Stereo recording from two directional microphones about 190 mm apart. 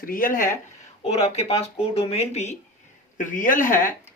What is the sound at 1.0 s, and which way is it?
Speech, 30° left (ahead or behind).